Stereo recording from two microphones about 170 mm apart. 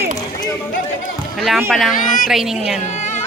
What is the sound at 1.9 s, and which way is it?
Speech, 50° left (ahead or behind).